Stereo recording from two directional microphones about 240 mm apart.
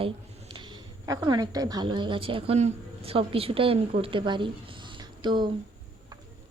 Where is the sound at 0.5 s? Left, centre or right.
Centre.